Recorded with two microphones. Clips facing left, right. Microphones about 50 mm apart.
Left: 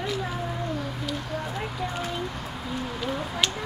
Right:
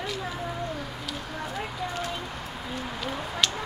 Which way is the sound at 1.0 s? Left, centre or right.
Centre.